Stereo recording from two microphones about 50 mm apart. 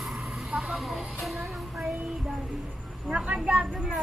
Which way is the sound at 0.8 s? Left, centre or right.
Centre.